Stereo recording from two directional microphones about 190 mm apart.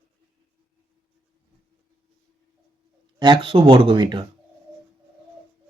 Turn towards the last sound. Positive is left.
turn(degrees=-25)  # may be behind; listen again after turning